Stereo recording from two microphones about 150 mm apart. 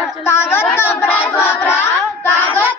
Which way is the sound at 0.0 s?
15° left (ahead or behind).